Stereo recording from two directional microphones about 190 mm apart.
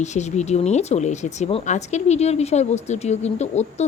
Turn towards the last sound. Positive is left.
turn(degrees=35)  # may be behind; listen again after turning